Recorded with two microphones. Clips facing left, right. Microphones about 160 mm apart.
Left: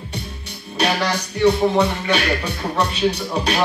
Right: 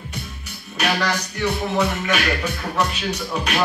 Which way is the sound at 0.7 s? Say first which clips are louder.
Left 2 dB; 35° left (ahead or behind).